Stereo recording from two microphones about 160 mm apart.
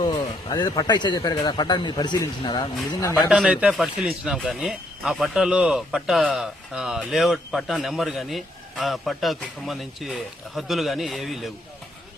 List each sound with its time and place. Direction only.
0.0 s speech: 25° left (ahead or behind)
3.2 s speech: 5° right (ahead or behind)